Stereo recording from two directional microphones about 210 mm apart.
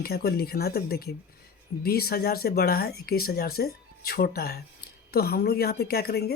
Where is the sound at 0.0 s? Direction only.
50° left (ahead or behind).